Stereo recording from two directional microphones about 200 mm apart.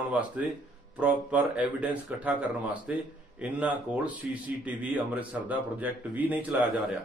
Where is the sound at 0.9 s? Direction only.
5° right (ahead or behind).